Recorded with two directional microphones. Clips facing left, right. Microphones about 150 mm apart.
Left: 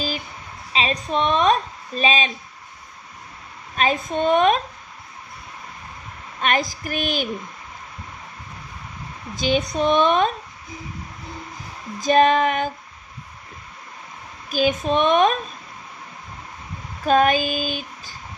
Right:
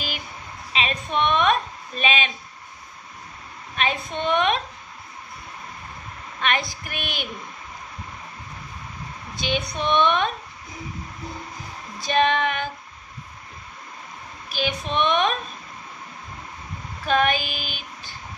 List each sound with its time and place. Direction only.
0.7 s a woman's voice: 35° left (ahead or behind)
3.7 s a woman's voice: 40° left (ahead or behind)
6.4 s a woman's voice: 40° left (ahead or behind)
9.3 s a woman's voice: 45° left (ahead or behind)
12.0 s a woman's voice: 40° left (ahead or behind)
14.5 s a woman's voice: 40° left (ahead or behind)
17.0 s a woman's voice: 40° left (ahead or behind)